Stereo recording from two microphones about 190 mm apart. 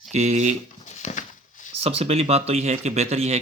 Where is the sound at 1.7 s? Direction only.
30° right (ahead or behind).